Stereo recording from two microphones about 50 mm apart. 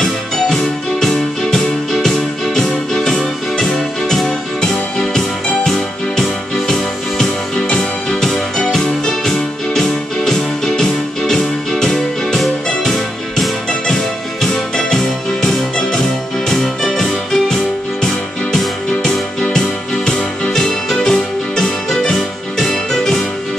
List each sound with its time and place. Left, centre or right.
0.0 s music: centre